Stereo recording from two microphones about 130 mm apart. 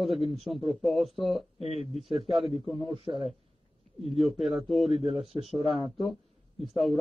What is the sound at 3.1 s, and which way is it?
Speech, 20° right (ahead or behind).